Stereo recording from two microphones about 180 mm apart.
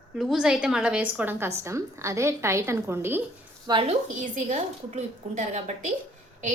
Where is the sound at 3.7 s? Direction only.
30° right (ahead or behind).